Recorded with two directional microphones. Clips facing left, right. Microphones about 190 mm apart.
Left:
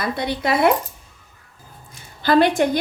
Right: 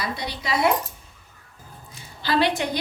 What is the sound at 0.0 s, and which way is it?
Speech, 55° left (ahead or behind).